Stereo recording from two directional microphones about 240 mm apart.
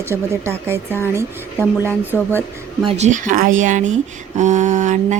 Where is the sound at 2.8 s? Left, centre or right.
Right.